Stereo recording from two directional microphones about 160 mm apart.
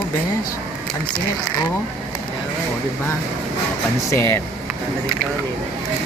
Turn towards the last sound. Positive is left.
turn(degrees=15)  # may be behind; listen again after turning